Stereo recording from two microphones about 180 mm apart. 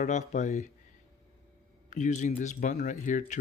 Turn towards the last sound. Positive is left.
turn(degrees=45)  # may be behind; listen again after turning